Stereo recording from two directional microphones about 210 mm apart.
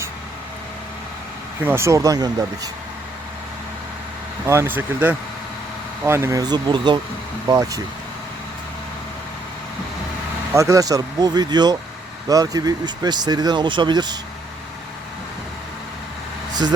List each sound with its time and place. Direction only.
1.6 s speech: 10° right (ahead or behind)
4.4 s speech: 10° right (ahead or behind)
10.5 s speech: 15° right (ahead or behind)